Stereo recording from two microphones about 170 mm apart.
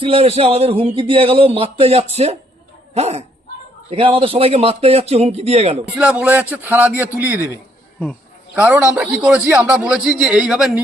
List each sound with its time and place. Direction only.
0.0 s a man's voice: 35° right (ahead or behind)
6.0 s a man's voice: 5° right (ahead or behind)
8.5 s a man's voice: 10° right (ahead or behind)